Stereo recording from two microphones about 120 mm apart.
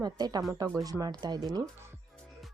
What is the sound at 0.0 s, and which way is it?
Speech, 35° right (ahead or behind).